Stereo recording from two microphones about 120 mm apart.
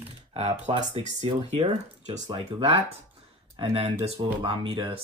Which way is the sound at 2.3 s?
40° right (ahead or behind).